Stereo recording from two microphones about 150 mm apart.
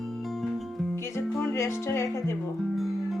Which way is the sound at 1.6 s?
20° left (ahead or behind).